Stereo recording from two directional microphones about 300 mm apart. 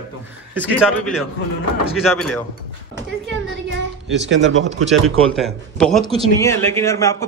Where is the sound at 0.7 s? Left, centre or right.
Centre.